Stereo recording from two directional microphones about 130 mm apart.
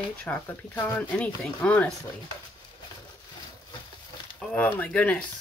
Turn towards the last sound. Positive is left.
turn(degrees=10)  # may be behind; listen again after turning